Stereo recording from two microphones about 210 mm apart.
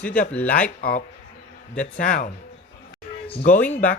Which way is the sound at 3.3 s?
35° left (ahead or behind).